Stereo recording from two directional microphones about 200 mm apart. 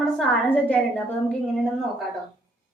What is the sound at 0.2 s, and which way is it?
Speech, 5° left (ahead or behind).